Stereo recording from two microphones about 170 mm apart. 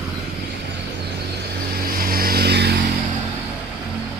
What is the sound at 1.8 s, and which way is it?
Vehicle, 60° right (ahead or behind).